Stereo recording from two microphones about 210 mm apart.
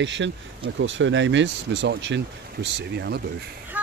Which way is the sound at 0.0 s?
60° right (ahead or behind).